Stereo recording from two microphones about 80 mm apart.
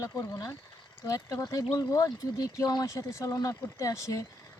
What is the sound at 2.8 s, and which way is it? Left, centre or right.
Speech, left.